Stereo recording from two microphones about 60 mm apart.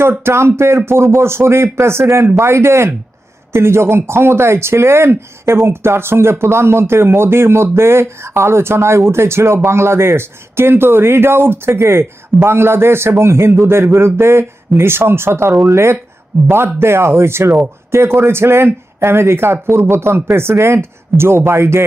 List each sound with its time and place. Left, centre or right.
0.0 s speech: right